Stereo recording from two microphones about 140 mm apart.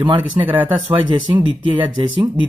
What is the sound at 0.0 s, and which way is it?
Speech, 40° right (ahead or behind).